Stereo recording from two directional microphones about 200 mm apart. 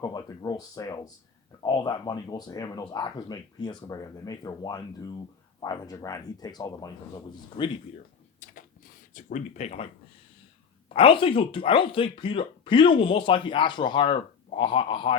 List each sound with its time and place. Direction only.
0.0 s a sound: 20° left (ahead or behind)
1.6 s speech: 20° left (ahead or behind)
9.1 s speech: 35° left (ahead or behind)